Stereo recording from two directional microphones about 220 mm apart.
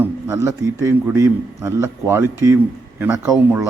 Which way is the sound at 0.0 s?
10° right (ahead or behind).